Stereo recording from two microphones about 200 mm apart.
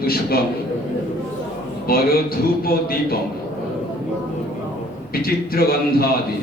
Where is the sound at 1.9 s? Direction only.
50° left (ahead or behind).